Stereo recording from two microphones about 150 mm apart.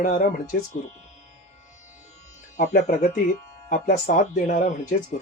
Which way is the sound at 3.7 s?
65° left (ahead or behind).